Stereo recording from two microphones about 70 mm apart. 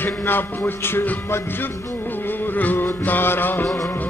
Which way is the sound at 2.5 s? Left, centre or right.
Left.